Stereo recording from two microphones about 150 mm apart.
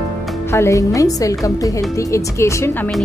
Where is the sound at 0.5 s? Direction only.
20° left (ahead or behind).